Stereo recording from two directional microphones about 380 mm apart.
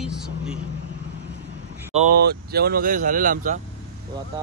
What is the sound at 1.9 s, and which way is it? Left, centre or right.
Speech, right.